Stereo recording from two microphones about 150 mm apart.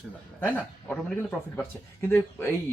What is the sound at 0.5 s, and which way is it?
Speech, 5° left (ahead or behind).